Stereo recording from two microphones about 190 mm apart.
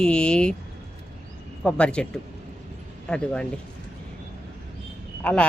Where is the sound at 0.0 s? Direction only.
5° left (ahead or behind).